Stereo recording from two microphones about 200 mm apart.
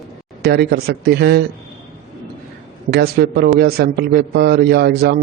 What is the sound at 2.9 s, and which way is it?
A man's voice, 50° right (ahead or behind).